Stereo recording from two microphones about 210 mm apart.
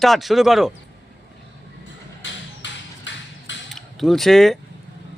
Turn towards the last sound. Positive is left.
turn(degrees=0)  # may be behind; listen again after turning